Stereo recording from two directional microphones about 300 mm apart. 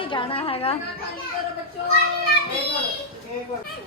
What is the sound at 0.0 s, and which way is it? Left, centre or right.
Speech, centre.